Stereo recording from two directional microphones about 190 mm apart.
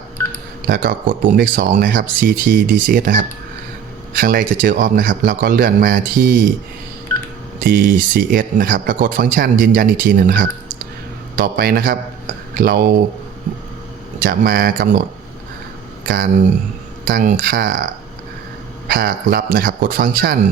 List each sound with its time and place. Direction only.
0.7 s speech: 50° right (ahead or behind)
7.6 s speech: 50° right (ahead or behind)
14.2 s speech: 50° right (ahead or behind)
16.0 s speech: 50° right (ahead or behind)
18.9 s speech: 50° right (ahead or behind)